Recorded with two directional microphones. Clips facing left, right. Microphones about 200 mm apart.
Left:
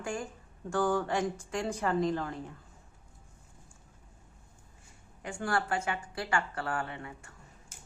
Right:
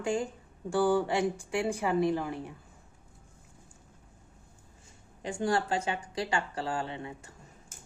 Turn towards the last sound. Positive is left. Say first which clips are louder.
# right 3 dB
turn(degrees=-20)  # may be behind; listen again after turning